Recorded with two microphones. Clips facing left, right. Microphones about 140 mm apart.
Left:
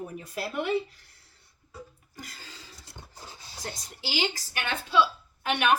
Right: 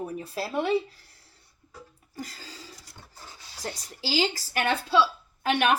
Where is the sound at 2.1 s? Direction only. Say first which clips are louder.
Right 6 dB; 35° right (ahead or behind).